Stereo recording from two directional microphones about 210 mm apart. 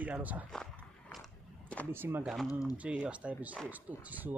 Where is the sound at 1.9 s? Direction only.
10° right (ahead or behind).